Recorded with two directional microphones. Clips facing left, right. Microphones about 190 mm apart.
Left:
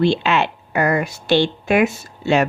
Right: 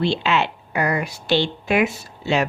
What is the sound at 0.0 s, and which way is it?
Speech, 50° left (ahead or behind).